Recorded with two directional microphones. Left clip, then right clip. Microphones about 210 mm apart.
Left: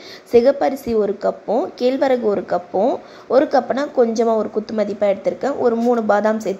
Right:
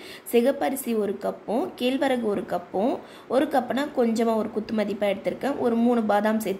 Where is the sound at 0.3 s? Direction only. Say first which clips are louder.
Left 8 dB; 15° left (ahead or behind).